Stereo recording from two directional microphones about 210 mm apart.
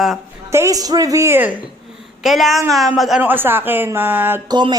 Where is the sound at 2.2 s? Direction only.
Centre (ahead or behind).